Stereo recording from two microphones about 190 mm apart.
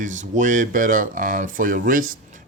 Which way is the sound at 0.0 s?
40° right (ahead or behind).